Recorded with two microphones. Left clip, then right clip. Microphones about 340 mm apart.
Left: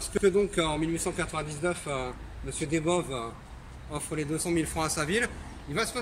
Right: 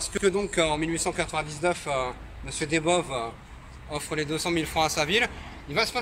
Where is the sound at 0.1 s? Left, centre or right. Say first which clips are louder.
Left 1 dB; centre.